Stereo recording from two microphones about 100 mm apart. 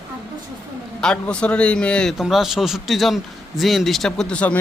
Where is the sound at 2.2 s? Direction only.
Centre (ahead or behind).